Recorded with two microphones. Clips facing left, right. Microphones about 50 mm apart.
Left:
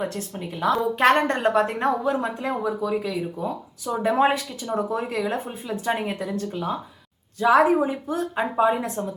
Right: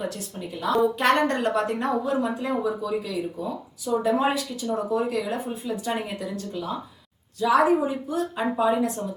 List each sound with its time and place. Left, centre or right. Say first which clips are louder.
0.1 s speech: left 2 dB; left